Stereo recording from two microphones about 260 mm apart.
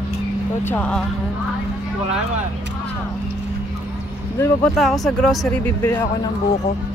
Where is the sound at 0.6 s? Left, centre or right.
Centre.